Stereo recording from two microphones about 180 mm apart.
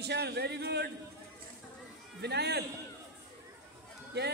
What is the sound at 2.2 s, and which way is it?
Speech, 65° right (ahead or behind).